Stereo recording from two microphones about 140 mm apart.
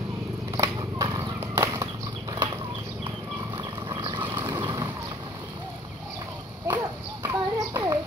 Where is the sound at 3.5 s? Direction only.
40° right (ahead or behind).